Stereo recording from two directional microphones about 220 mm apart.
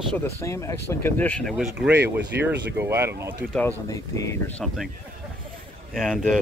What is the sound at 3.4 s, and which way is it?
Speech, 45° right (ahead or behind).